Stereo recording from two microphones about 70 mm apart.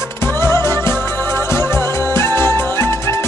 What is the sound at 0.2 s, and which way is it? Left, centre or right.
Music, left.